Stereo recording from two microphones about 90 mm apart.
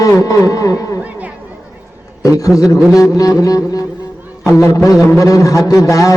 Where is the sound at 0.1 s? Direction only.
35° left (ahead or behind).